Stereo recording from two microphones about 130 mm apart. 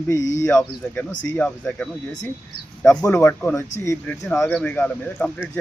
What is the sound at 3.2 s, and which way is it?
Speech, 15° left (ahead or behind).